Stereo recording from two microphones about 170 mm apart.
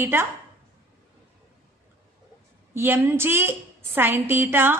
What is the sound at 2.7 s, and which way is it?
A woman's voice, 15° right (ahead or behind).